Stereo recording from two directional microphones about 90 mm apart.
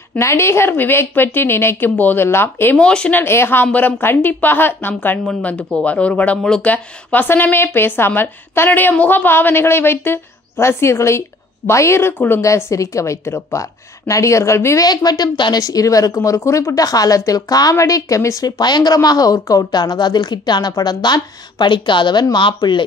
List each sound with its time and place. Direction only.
0.2 s speech: 30° left (ahead or behind)
2.8 s speech: 10° left (ahead or behind); by 14.9 s 30° left (ahead or behind)
14.9 s a woman's voice: 50° left (ahead or behind)
15.6 s speech: 40° left (ahead or behind)
18.6 s a woman's voice: 55° left (ahead or behind)